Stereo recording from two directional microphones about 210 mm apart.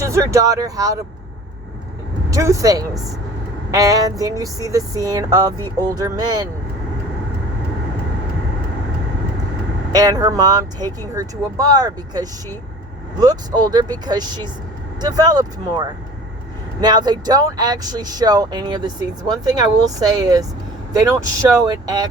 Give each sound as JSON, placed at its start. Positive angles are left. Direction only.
{"t": 0.0, "sound": "speech", "side_deg": -15}
{"t": 2.3, "sound": "speech", "side_deg": -15}
{"t": 9.9, "sound": "speech", "side_deg": -20}